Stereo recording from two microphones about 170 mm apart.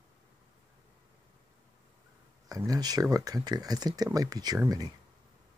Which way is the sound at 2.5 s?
20° right (ahead or behind).